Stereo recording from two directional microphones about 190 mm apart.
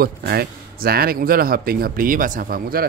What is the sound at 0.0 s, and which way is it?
Speech, 55° right (ahead or behind).